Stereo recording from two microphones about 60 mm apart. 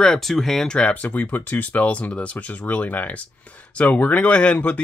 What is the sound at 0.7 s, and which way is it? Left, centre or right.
Speech, centre.